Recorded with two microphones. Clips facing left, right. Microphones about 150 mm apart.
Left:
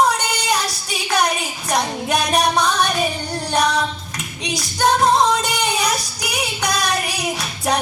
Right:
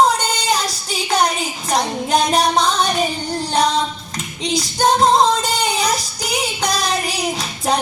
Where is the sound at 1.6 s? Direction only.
30° right (ahead or behind).